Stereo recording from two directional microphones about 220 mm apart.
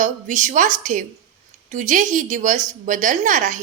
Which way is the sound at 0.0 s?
35° right (ahead or behind).